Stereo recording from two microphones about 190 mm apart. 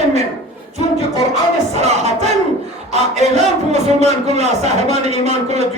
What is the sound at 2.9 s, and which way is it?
A man's voice, 35° right (ahead or behind).